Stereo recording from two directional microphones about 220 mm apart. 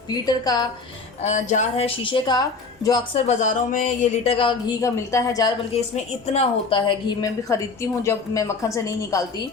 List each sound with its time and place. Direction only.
0.1 s a woman's voice: 15° left (ahead or behind)
1.2 s speech: 30° left (ahead or behind)
3.2 s speech: 35° left (ahead or behind); by 5.5 s 15° left (ahead or behind)
5.7 s a woman's voice: 30° left (ahead or behind)